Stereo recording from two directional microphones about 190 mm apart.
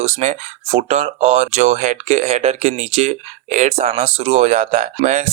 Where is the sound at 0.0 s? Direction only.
35° right (ahead or behind).